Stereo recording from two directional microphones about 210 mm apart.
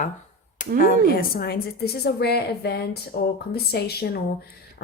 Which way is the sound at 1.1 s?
45° left (ahead or behind).